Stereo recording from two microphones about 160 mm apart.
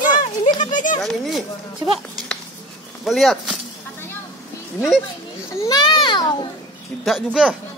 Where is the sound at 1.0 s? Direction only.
Centre (ahead or behind).